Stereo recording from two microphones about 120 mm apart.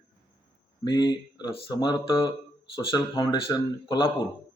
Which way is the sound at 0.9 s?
35° left (ahead or behind).